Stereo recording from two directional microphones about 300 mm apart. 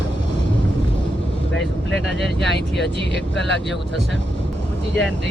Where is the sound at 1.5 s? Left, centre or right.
Left.